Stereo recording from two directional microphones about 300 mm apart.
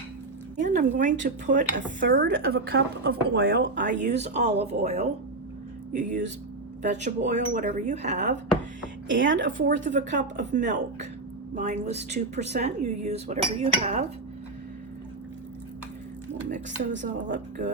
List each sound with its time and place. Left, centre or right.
0.6 s a woman's voice: right
17.0 s a woman's voice: right